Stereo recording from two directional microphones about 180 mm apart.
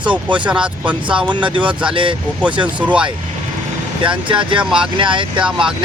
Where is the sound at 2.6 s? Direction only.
10° right (ahead or behind).